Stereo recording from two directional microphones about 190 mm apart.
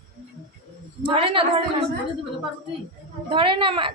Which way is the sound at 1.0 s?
30° right (ahead or behind).